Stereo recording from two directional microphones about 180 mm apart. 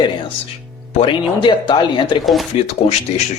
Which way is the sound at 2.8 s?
35° left (ahead or behind).